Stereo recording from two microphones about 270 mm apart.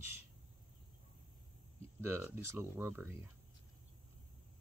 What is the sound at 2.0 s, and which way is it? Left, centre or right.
Speech, centre.